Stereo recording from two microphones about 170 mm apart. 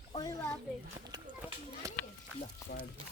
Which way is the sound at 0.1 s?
25° left (ahead or behind).